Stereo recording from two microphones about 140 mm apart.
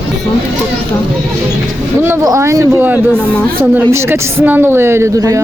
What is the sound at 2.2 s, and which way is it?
A woman's voice, 20° right (ahead or behind).